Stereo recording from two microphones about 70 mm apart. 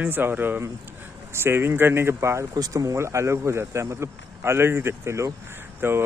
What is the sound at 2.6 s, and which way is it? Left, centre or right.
Speech, right.